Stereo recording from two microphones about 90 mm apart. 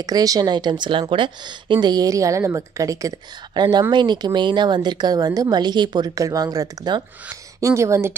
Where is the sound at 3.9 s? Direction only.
55° right (ahead or behind).